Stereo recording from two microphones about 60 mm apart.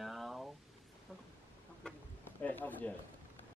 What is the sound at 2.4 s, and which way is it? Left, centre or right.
Speech, left.